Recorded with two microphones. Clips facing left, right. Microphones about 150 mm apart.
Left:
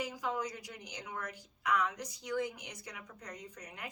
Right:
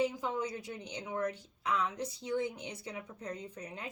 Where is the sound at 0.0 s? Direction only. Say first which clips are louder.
Right 4 dB; 25° right (ahead or behind).